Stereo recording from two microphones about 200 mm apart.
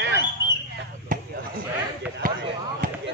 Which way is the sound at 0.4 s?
20° left (ahead or behind).